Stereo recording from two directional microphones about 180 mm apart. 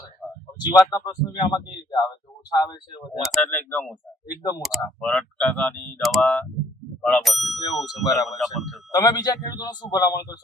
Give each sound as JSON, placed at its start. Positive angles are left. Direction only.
{"t": 0.2, "sound": "a sound", "side_deg": 0}
{"t": 0.6, "sound": "speech", "side_deg": 25}
{"t": 3.2, "sound": "speech", "side_deg": 5}
{"t": 8.0, "sound": "speech", "side_deg": 20}
{"t": 8.3, "sound": "speech", "side_deg": 0}
{"t": 8.9, "sound": "speech", "side_deg": 20}